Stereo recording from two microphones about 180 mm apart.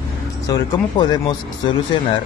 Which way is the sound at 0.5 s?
25° left (ahead or behind).